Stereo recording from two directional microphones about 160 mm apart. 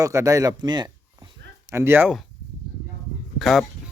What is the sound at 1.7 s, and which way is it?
Speech, 15° right (ahead or behind).